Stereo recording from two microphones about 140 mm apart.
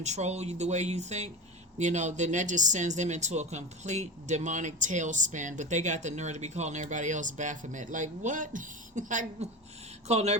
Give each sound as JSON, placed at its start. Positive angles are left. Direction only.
{"t": 0.0, "sound": "speech", "side_deg": -55}
{"t": 10.1, "sound": "speech", "side_deg": -50}